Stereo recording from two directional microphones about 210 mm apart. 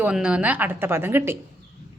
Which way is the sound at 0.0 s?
5° right (ahead or behind).